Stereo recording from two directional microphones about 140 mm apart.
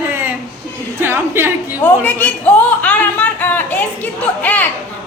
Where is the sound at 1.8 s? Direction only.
10° left (ahead or behind).